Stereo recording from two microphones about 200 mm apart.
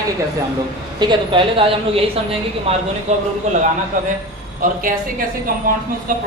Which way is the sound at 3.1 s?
35° right (ahead or behind).